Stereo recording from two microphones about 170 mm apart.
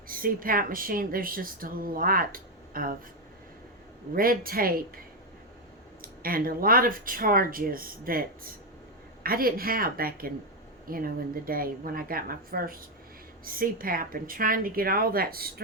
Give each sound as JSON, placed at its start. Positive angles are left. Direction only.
{"t": 0.1, "sound": "speech", "side_deg": -55}
{"t": 4.1, "sound": "speech", "side_deg": -60}
{"t": 6.0, "sound": "speech", "side_deg": -60}